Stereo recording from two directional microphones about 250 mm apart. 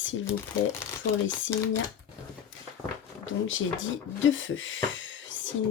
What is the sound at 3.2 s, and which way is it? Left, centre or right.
Speech, left.